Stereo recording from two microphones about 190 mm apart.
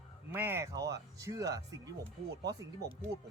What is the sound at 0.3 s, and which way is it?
Speech, 10° right (ahead or behind).